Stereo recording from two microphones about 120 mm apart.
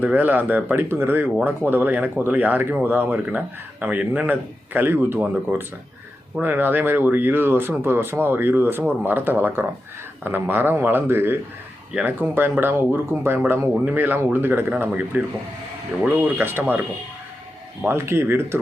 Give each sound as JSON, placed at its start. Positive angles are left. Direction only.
{"t": 0.0, "sound": "speech", "side_deg": -15}
{"t": 17.8, "sound": "speech", "side_deg": -20}